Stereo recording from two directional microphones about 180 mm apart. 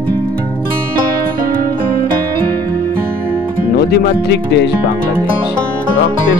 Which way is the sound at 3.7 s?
65° left (ahead or behind).